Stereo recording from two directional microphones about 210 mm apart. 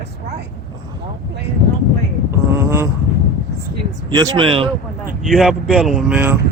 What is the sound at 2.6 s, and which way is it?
Vehicle, 10° right (ahead or behind).